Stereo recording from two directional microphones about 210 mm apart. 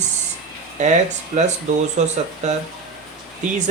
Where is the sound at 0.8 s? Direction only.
35° right (ahead or behind).